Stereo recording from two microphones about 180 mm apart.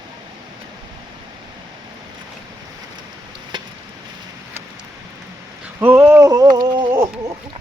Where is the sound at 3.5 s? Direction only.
25° right (ahead or behind).